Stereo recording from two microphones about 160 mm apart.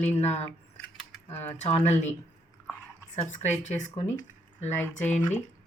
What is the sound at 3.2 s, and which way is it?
Speech, 45° left (ahead or behind).